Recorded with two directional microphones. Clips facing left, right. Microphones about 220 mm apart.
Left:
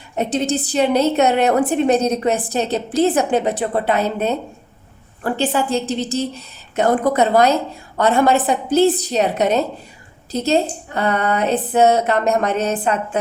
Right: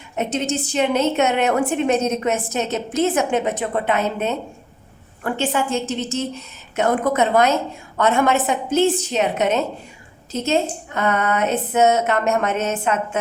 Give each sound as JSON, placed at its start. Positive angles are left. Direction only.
{"t": 0.2, "sound": "a woman's voice", "side_deg": 35}